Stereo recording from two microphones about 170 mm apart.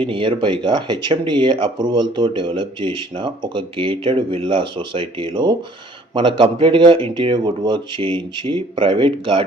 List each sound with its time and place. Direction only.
0.0 s speech: 30° right (ahead or behind)